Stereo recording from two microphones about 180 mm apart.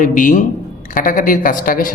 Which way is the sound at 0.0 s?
45° left (ahead or behind).